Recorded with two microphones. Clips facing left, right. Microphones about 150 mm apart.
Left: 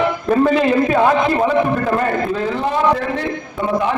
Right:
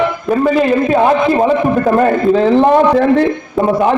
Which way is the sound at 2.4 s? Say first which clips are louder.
Right 10 dB; 65° right (ahead or behind).